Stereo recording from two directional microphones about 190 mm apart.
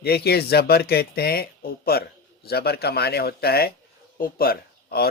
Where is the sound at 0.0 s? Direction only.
55° left (ahead or behind).